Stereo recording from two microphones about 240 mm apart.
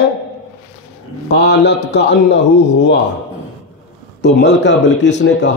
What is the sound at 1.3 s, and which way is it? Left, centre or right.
Speech, left.